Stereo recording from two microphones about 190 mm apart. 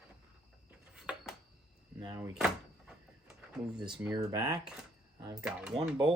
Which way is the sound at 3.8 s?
20° right (ahead or behind).